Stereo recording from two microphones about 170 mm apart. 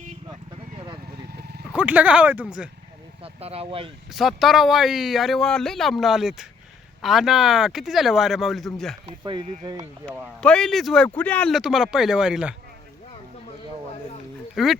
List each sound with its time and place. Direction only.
1.3 s a sound: 70° right (ahead or behind)
1.6 s speech: 5° right (ahead or behind)
3.2 s speech: 35° right (ahead or behind)
4.1 s speech: centre (ahead or behind)
9.0 s speech: 30° right (ahead or behind)
10.4 s speech: 5° left (ahead or behind)
14.5 s speech: centre (ahead or behind)